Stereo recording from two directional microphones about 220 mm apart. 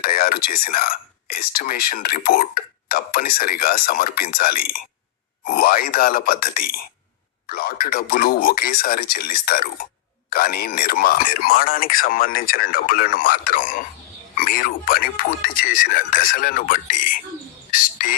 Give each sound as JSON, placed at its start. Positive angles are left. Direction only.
{"t": 0.0, "sound": "speech", "side_deg": 40}
{"t": 17.7, "sound": "cricket", "side_deg": 40}